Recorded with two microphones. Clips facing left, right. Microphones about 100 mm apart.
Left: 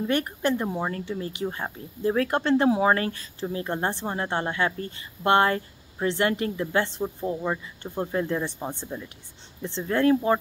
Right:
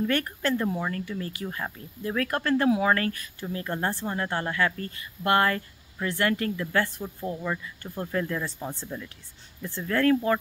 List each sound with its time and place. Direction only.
0.0 s a woman's voice: 20° left (ahead or behind)